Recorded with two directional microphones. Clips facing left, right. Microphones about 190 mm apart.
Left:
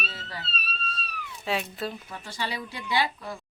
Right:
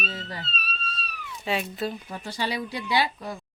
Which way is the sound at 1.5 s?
Centre (ahead or behind).